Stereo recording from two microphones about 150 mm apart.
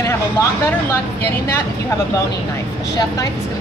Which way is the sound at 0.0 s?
20° left (ahead or behind).